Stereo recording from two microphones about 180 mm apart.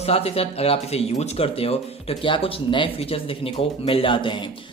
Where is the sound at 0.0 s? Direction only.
35° left (ahead or behind).